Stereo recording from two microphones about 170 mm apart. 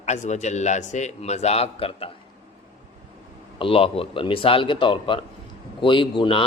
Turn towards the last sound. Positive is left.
turn(degrees=30)  # may be behind; listen again after turning